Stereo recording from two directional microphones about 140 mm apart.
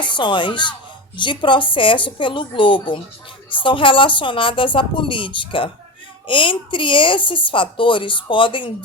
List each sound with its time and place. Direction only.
0.0 s speech: 35° left (ahead or behind)